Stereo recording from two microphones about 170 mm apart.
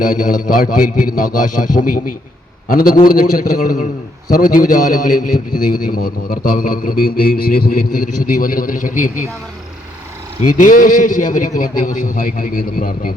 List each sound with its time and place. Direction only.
0.0 s a man's voice: 50° left (ahead or behind)
5.5 s a man's voice: 25° left (ahead or behind)
6.5 s a man's voice: 55° left (ahead or behind)
10.6 s a man's voice: 55° left (ahead or behind)